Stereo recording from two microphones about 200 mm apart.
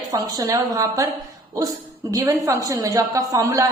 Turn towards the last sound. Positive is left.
turn(degrees=-15)  # may be behind; listen again after turning